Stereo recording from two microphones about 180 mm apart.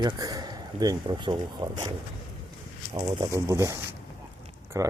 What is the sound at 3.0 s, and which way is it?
Speech, 25° right (ahead or behind).